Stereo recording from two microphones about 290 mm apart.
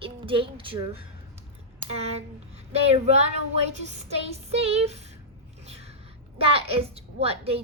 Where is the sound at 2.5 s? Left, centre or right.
Right.